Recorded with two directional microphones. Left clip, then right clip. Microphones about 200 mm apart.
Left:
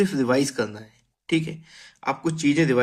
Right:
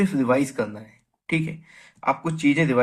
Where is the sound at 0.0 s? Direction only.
55° left (ahead or behind).